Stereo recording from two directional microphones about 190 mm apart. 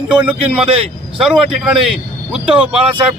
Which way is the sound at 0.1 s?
5° right (ahead or behind).